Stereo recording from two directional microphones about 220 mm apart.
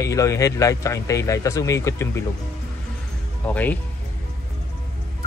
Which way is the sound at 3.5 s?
5° left (ahead or behind).